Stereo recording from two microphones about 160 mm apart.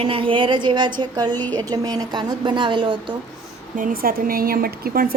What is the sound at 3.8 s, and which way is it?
A woman's voice, 60° right (ahead or behind).